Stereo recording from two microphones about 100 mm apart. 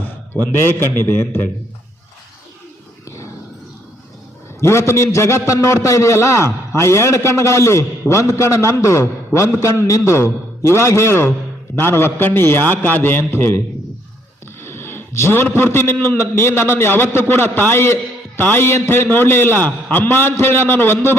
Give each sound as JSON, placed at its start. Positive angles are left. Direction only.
{"t": 0.9, "sound": "a man's voice", "side_deg": 20}
{"t": 4.6, "sound": "a man's voice", "side_deg": 25}
{"t": 14.6, "sound": "a man's voice", "side_deg": 25}